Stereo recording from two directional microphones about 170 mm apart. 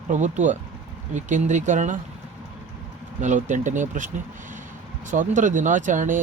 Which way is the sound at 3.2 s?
45° right (ahead or behind).